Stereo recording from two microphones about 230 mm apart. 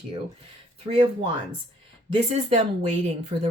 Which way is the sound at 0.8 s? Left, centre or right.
Right.